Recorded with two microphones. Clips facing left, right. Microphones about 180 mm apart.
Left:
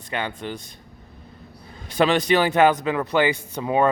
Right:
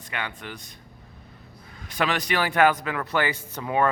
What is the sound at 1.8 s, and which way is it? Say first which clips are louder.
A man's voice: left 7 dB; 25° left (ahead or behind).